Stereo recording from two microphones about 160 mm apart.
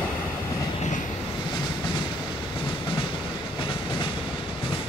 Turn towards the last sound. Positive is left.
turn(degrees=35)  # may be behind; listen again after turning